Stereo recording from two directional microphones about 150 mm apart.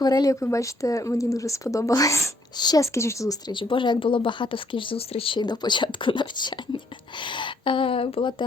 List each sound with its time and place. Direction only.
0.0 s speech: 25° left (ahead or behind)
3.5 s speech: 35° left (ahead or behind)